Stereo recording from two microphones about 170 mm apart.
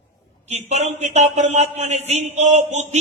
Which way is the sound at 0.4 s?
40° right (ahead or behind).